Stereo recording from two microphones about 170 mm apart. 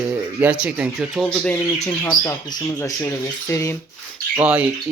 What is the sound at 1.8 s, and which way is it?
Speech, 20° left (ahead or behind).